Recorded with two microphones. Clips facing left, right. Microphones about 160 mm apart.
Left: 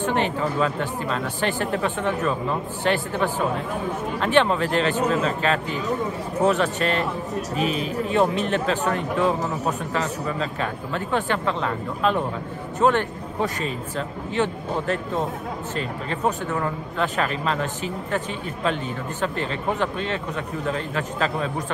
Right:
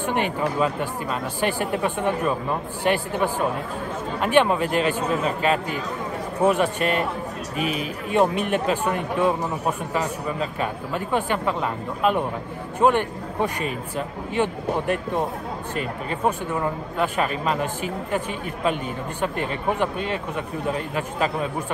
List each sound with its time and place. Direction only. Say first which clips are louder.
0.0 s speech: left 1 dB; 15° right (ahead or behind)
7.5 s speech: left 1 dB; 35° left (ahead or behind)
8.1 s speech: right 2 dB; 15° right (ahead or behind)